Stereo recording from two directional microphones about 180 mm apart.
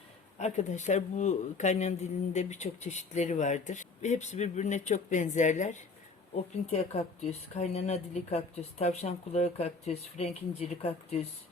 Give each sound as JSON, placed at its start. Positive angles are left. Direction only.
{"t": 0.3, "sound": "speech", "side_deg": 40}